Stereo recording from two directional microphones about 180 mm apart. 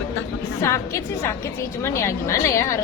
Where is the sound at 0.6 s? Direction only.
15° left (ahead or behind).